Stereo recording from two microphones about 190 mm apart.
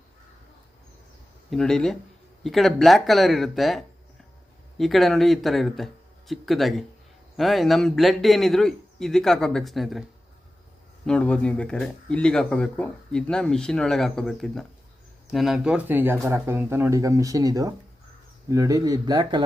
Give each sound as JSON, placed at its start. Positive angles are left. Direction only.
{"t": 1.5, "sound": "speech", "side_deg": 5}
{"t": 11.0, "sound": "speech", "side_deg": 5}